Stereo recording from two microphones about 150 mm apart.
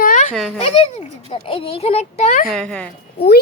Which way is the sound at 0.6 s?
40° left (ahead or behind).